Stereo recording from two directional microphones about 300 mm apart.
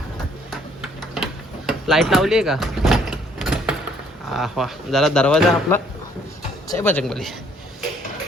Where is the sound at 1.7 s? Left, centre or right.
Centre.